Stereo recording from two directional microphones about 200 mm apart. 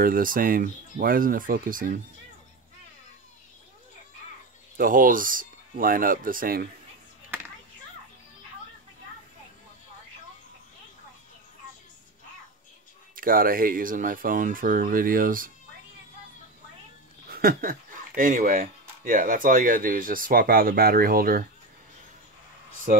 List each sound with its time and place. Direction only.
0.0 s speech: 45° right (ahead or behind)
4.7 s speech: 45° right (ahead or behind)
13.1 s speech: 45° right (ahead or behind)
17.3 s speech: 50° right (ahead or behind)
22.9 s speech: 45° right (ahead or behind)